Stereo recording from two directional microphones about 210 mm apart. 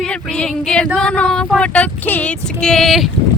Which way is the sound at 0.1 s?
5° left (ahead or behind).